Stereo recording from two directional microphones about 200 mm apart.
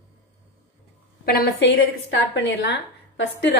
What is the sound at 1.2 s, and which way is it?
A woman's voice, 55° left (ahead or behind).